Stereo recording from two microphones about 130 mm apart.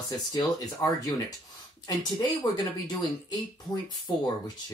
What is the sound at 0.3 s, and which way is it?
Speech, 25° left (ahead or behind).